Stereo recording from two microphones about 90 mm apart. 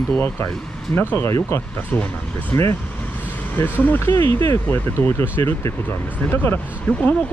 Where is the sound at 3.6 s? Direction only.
20° left (ahead or behind).